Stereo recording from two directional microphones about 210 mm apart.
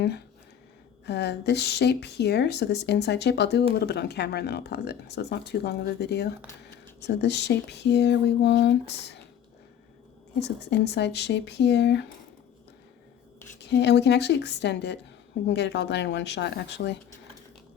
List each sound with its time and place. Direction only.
1.0 s speech: 50° left (ahead or behind)
10.4 s speech: 55° left (ahead or behind)
13.6 s speech: 55° left (ahead or behind)